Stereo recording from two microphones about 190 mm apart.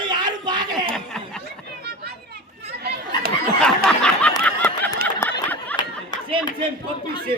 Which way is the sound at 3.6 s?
5° left (ahead or behind).